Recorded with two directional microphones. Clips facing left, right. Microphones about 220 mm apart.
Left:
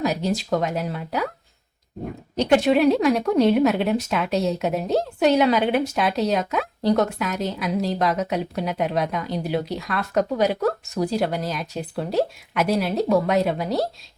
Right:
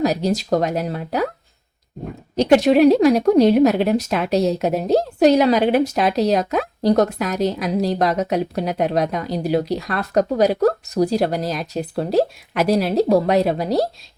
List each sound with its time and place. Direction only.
0.0 s a woman's voice: 40° right (ahead or behind)
2.4 s a woman's voice: 40° right (ahead or behind)